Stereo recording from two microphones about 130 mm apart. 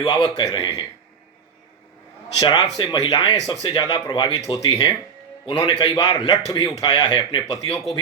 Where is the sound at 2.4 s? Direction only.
30° left (ahead or behind).